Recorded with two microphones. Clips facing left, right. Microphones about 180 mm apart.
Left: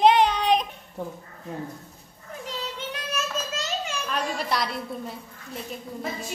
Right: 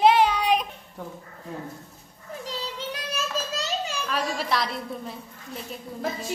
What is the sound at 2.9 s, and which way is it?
Child singing, 35° right (ahead or behind).